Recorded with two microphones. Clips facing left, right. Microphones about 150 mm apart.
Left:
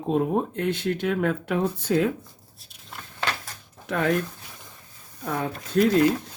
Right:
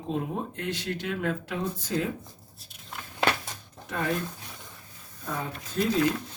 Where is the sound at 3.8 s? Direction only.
80° left.